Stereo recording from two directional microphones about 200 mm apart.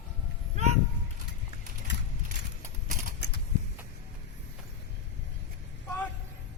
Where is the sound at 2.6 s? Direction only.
35° right (ahead or behind).